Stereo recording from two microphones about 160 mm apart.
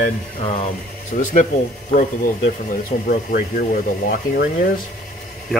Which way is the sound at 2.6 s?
60° left (ahead or behind).